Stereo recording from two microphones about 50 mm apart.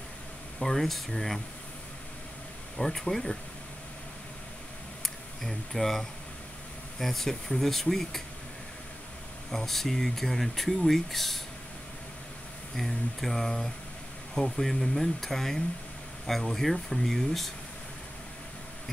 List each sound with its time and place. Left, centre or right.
0.6 s speech: centre
2.8 s speech: centre
5.0 s speech: centre
9.5 s speech: centre
12.7 s speech: centre